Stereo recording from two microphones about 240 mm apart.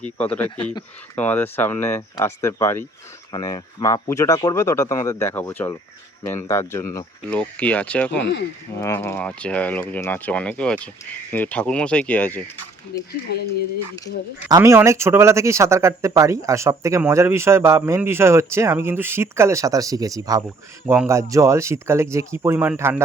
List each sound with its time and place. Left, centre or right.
0.2 s speech: centre
8.2 s speech: left
8.7 s speech: centre
12.9 s speech: left
14.5 s speech: centre